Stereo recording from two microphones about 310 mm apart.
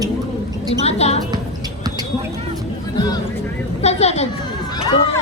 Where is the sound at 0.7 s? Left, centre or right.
Centre.